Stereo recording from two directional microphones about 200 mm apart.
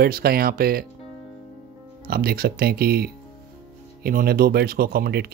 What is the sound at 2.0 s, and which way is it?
Speech, 50° right (ahead or behind).